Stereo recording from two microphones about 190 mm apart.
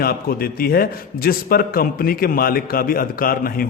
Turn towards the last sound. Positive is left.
turn(degrees=50)  # may be behind; listen again after turning